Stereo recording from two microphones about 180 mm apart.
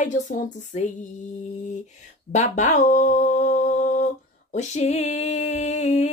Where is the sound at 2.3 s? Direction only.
40° left (ahead or behind).